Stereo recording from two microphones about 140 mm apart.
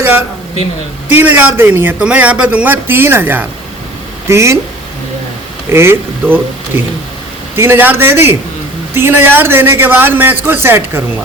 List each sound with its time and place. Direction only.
0.0 s a man's voice: 15° right (ahead or behind)
5.7 s a man's voice: 15° right (ahead or behind)